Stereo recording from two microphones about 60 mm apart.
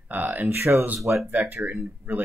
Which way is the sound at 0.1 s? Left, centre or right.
Right.